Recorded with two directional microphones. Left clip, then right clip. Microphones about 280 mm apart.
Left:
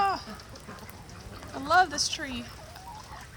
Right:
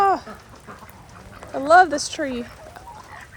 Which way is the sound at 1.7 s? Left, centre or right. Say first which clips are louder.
Right 9 dB; centre.